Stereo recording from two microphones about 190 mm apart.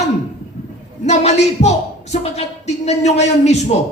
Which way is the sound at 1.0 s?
35° left (ahead or behind).